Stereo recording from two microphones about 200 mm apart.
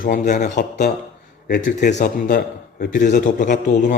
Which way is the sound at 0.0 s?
40° left (ahead or behind).